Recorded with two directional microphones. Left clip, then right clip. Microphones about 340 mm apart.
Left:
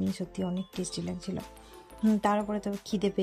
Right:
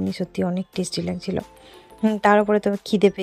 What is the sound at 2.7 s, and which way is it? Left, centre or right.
Speech, centre.